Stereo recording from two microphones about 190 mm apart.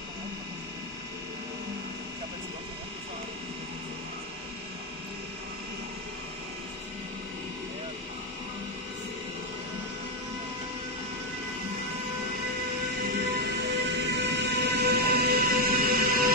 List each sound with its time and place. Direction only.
13.1 s train: 65° right (ahead or behind); by 16.3 s 50° right (ahead or behind)